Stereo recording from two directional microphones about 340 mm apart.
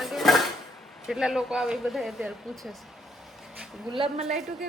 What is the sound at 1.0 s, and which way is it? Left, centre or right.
Speech, centre.